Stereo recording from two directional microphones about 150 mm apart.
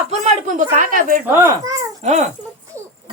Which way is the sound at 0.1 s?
55° right (ahead or behind).